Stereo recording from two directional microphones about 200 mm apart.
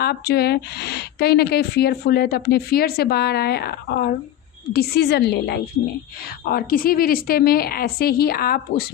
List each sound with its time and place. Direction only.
0.0 s speech: 55° left (ahead or behind)